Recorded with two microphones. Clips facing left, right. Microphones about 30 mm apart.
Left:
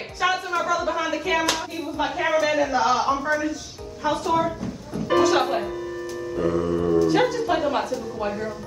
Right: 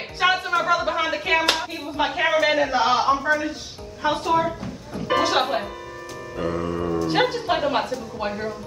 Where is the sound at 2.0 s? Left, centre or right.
Right.